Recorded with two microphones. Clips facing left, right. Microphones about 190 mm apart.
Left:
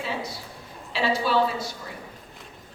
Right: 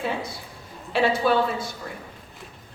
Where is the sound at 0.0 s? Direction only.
55° right (ahead or behind).